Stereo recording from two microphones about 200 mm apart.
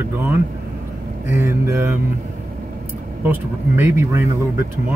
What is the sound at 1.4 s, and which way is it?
Speech, 15° right (ahead or behind).